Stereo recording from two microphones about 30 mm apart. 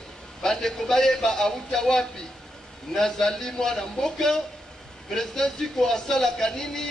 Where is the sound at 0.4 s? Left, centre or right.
Centre.